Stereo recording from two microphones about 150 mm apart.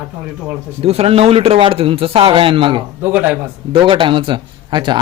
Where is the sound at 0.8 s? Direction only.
40° right (ahead or behind).